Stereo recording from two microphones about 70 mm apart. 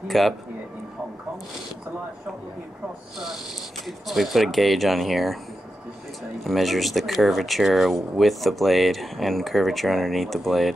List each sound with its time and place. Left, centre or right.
0.1 s speech: centre
3.8 s speech: centre
6.4 s speech: centre